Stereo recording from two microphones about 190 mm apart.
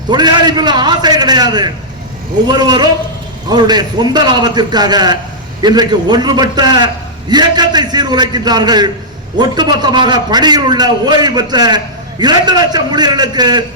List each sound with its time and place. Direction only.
0.1 s a man's voice: 20° right (ahead or behind)